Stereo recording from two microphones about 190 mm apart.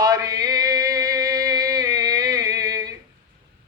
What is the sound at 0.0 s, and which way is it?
Chant, 20° right (ahead or behind).